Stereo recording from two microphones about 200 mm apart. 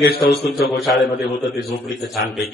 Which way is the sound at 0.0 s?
50° left (ahead or behind).